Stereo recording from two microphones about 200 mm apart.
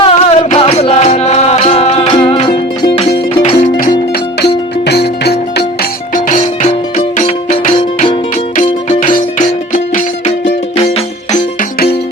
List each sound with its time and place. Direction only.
0.0 s music: 30° left (ahead or behind)
3.6 s music: 40° left (ahead or behind)
4.4 s music: 55° left (ahead or behind)
6.1 s music: 40° left (ahead or behind)